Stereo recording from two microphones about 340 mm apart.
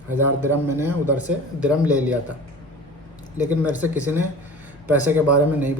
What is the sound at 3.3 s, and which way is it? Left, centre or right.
Speech, centre.